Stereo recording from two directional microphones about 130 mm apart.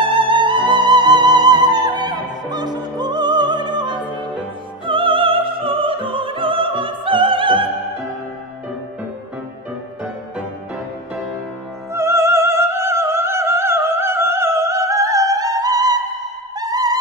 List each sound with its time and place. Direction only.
0.0 s music: 40° right (ahead or behind)
11.9 s opera: 20° right (ahead or behind)
16.5 s music: 30° right (ahead or behind)